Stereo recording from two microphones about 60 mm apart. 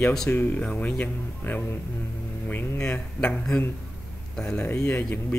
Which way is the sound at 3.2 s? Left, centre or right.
Left.